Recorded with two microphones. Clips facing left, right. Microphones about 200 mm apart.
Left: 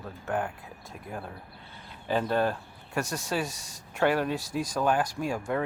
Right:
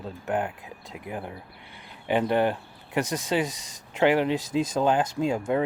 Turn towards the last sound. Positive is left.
turn(degrees=-20)  # may be behind; listen again after turning